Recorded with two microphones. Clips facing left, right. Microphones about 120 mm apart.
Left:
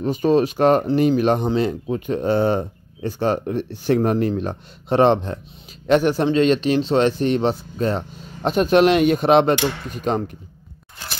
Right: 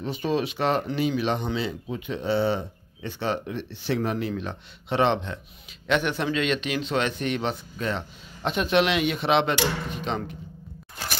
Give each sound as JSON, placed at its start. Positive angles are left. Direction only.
{"t": 0.0, "sound": "speech", "side_deg": 45}